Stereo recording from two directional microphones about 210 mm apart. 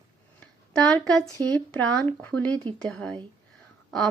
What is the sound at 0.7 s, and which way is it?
Speech, 5° left (ahead or behind).